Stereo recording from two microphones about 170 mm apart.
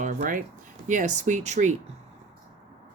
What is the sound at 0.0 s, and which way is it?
Speech, 50° right (ahead or behind).